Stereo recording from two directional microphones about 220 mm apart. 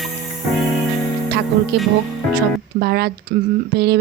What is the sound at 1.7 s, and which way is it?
A woman's voice, 45° right (ahead or behind).